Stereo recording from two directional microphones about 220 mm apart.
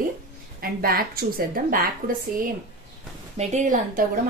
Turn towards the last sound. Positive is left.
turn(degrees=-35)  # may be behind; listen again after turning